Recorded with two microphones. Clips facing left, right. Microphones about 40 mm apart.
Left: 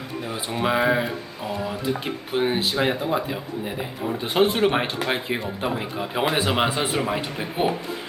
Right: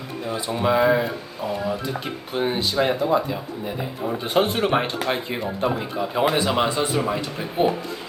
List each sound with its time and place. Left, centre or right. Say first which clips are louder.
0.5 s speech: right 2 dB; centre
2.3 s speech: even; centre